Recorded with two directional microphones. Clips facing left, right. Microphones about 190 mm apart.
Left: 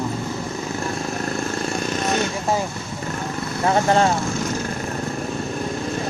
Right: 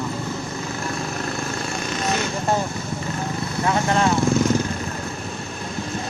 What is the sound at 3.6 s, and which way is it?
Speech, 35° left (ahead or behind).